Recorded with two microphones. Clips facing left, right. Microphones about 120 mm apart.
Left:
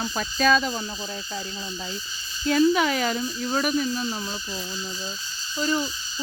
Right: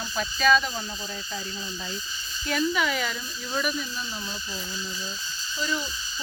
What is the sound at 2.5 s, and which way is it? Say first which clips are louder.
Speech: left 6 dB; 35° left (ahead or behind).